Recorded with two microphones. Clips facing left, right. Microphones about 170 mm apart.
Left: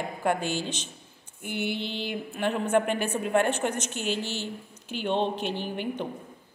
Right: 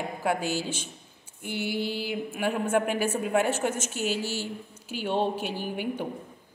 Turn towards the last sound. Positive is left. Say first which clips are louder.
# even
turn(degrees=-10)  # may be behind; listen again after turning